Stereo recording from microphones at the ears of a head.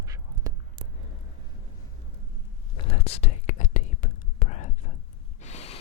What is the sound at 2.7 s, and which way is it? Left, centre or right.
Whispering, left.